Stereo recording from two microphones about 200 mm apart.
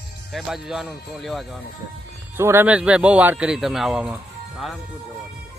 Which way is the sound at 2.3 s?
10° right (ahead or behind).